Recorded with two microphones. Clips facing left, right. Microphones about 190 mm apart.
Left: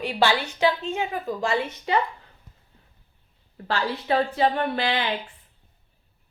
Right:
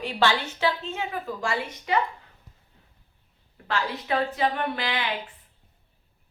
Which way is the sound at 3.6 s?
30° left (ahead or behind).